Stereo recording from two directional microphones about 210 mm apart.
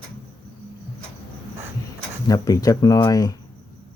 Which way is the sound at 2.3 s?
15° left (ahead or behind).